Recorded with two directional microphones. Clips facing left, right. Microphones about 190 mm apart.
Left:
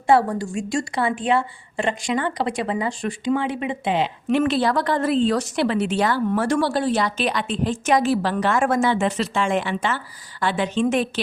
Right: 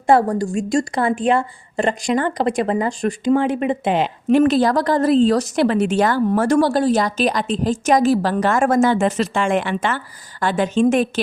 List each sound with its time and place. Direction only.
0.1 s a woman's voice: 45° right (ahead or behind)